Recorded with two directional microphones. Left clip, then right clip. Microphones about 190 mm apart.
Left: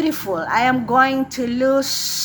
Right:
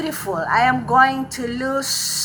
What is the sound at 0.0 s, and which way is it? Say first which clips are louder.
Speech: left 2 dB; 25° left (ahead or behind).